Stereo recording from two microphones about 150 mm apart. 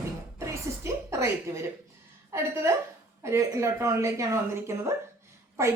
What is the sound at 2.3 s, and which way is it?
A woman's voice, 20° right (ahead or behind).